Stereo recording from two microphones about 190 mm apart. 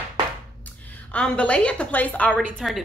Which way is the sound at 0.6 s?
10° left (ahead or behind).